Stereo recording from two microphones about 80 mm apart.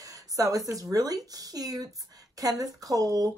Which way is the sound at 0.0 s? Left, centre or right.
Right.